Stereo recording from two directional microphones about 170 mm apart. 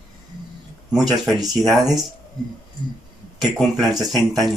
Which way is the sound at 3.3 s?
Centre (ahead or behind).